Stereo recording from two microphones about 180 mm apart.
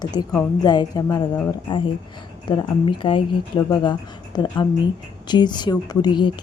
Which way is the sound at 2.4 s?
25° left (ahead or behind).